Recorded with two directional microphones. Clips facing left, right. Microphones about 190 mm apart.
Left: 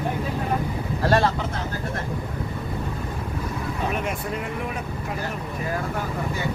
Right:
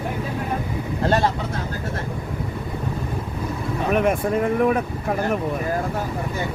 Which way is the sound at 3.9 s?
55° right (ahead or behind).